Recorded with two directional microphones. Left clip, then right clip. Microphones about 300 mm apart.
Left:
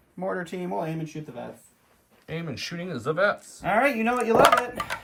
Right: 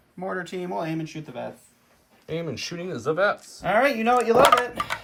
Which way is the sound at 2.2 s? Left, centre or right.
Centre.